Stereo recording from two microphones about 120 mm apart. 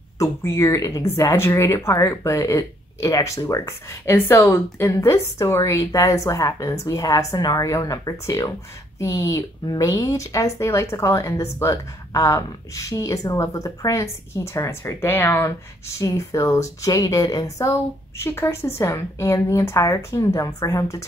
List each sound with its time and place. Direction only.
0.2 s speech: 20° left (ahead or behind)